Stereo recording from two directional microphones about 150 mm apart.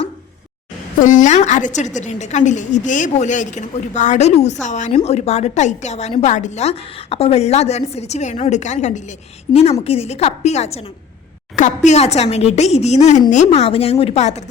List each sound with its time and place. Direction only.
0.9 s a woman's voice: 60° left (ahead or behind)